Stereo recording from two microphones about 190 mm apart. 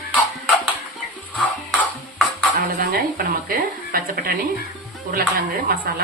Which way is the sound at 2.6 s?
50° right (ahead or behind).